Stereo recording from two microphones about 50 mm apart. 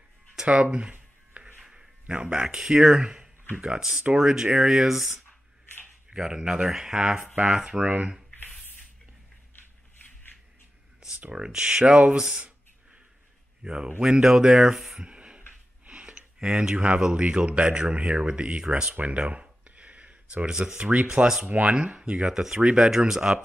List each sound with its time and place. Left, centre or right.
0.4 s speech: centre
7.8 s speech: right
11.3 s speech: centre
13.6 s speech: centre
15.0 s beatboxing: right
15.9 s a sound: right
16.6 s speech: right
19.4 s a sound: right
20.4 s speech: centre
22.8 s speech: centre